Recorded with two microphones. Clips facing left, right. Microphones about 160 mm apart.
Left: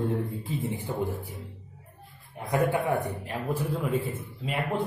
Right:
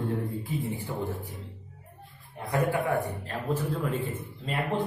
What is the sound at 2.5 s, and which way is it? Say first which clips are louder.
A man's voice: left 1 dB; 20° left (ahead or behind).